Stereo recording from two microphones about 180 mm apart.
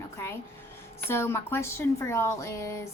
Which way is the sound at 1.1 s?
15° left (ahead or behind).